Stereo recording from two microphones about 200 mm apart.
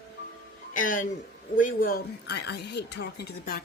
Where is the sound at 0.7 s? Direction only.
40° left (ahead or behind).